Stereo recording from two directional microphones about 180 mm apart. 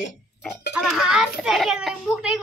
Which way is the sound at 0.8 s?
Centre (ahead or behind).